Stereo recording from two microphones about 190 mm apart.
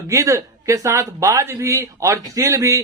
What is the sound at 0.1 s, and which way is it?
Speech, 15° right (ahead or behind).